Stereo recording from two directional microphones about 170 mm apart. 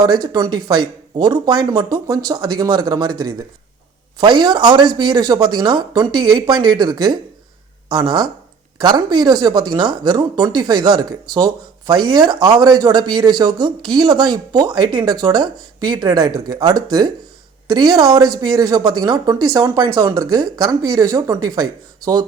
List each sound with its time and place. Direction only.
0.0 s speech: 25° right (ahead or behind)